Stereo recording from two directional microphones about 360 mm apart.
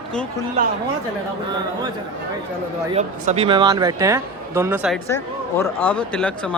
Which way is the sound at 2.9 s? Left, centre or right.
Centre.